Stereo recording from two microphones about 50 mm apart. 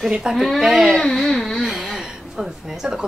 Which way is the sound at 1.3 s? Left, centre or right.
Centre.